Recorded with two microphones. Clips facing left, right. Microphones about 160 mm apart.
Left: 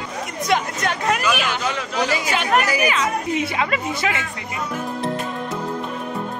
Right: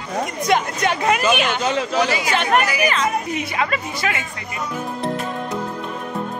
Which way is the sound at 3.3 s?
25° left (ahead or behind).